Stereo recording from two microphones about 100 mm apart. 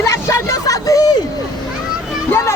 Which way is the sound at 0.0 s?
30° left (ahead or behind).